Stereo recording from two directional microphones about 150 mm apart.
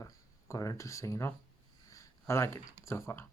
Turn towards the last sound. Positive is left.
turn(degrees=20)  # may be behind; listen again after turning